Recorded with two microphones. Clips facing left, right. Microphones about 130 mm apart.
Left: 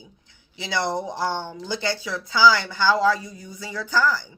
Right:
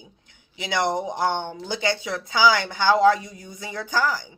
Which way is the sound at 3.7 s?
50° right (ahead or behind).